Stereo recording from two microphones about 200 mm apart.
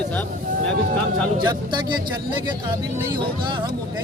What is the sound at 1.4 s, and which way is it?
Speech, 20° right (ahead or behind).